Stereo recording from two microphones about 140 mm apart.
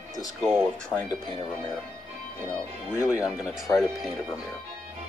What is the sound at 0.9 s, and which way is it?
Speech, 10° left (ahead or behind).